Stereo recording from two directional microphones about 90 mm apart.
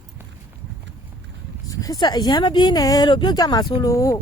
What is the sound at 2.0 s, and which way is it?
Speech, 50° left (ahead or behind).